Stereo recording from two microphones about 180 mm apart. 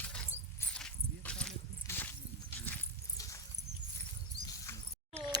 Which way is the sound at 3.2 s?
20° left (ahead or behind).